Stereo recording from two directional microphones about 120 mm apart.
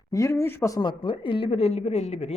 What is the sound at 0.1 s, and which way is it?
Speech, 25° left (ahead or behind).